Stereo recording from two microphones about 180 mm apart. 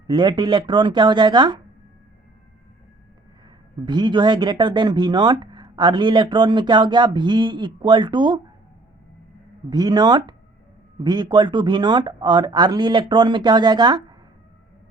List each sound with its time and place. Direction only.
0.1 s speech: 25° right (ahead or behind)
3.8 s speech: 25° right (ahead or behind)
9.6 s speech: 25° right (ahead or behind)